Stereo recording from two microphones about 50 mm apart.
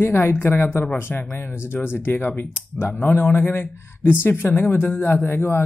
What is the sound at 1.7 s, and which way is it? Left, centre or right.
Speech, left.